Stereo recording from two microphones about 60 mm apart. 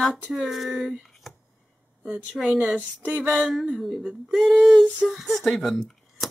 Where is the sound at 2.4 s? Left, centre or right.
Centre.